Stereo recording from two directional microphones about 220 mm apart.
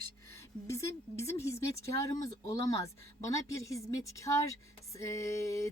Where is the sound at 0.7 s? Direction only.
15° left (ahead or behind).